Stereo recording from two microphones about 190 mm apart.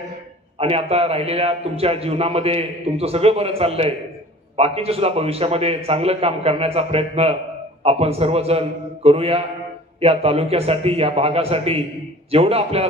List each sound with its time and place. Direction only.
0.6 s a man's voice: 30° right (ahead or behind)